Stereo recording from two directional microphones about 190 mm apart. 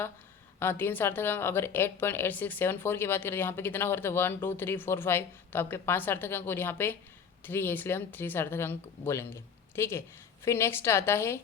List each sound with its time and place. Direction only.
0.6 s a woman's voice: 10° left (ahead or behind)